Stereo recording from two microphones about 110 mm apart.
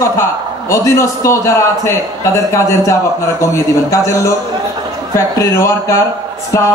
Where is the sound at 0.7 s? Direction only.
25° left (ahead or behind).